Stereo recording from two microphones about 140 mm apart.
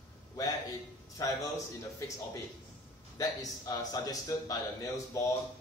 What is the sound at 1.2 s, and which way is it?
Speech, 25° left (ahead or behind).